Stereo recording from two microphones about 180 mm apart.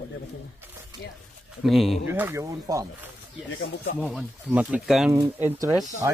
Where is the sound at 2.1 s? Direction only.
15° right (ahead or behind).